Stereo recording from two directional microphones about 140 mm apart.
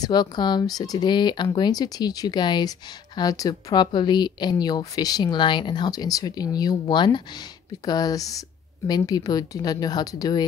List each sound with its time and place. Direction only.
0.0 s a woman's voice: 30° left (ahead or behind)